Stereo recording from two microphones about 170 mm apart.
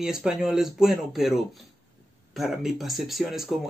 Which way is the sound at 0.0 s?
5° right (ahead or behind).